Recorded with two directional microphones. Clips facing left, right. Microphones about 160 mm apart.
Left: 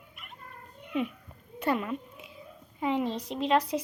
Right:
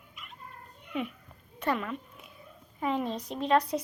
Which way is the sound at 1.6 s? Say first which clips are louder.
Left 2 dB; 25° left (ahead or behind).